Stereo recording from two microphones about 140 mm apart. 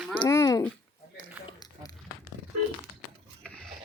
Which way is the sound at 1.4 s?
25° left (ahead or behind).